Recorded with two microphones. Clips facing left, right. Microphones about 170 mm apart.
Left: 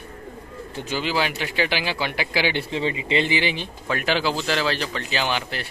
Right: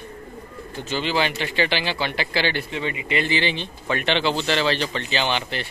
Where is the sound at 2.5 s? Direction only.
25° left (ahead or behind).